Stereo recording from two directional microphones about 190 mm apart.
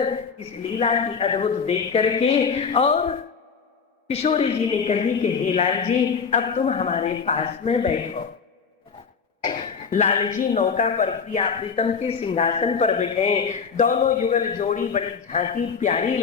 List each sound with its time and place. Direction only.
0.8 s a man's voice: 30° left (ahead or behind)
4.1 s a man's voice: 30° left (ahead or behind)
9.9 s a man's voice: 35° left (ahead or behind)